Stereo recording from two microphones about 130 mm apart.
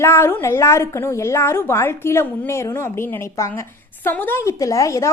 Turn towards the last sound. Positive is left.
turn(degrees=25)  # may be behind; listen again after turning